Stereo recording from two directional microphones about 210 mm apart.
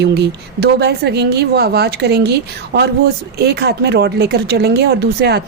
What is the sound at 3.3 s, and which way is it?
Speech, 50° right (ahead or behind).